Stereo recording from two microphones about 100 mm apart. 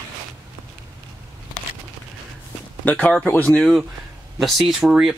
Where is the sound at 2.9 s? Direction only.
15° left (ahead or behind).